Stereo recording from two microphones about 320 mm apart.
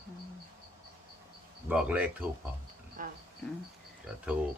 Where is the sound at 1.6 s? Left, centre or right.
Centre.